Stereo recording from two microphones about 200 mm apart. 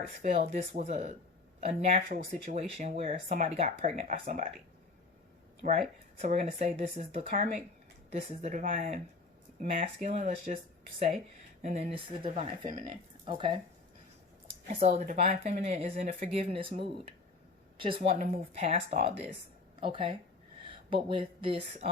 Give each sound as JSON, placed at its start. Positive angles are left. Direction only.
{"t": 0.2, "sound": "speech", "side_deg": -35}
{"t": 5.6, "sound": "speech", "side_deg": -40}
{"t": 11.6, "sound": "speech", "side_deg": -35}
{"t": 14.7, "sound": "speech", "side_deg": -30}